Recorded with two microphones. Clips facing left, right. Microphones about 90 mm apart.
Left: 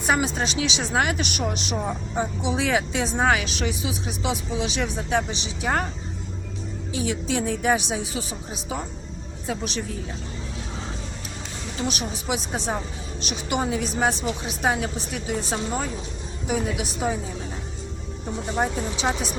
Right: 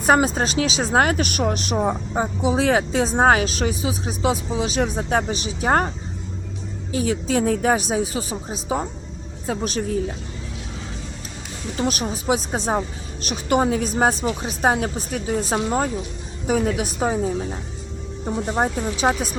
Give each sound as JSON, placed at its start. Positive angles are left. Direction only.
{"t": 0.0, "sound": "speech", "side_deg": -45}
{"t": 6.9, "sound": "a woman's voice", "side_deg": -40}
{"t": 11.8, "sound": "a woman's voice", "side_deg": -45}
{"t": 18.3, "sound": "a woman's voice", "side_deg": -40}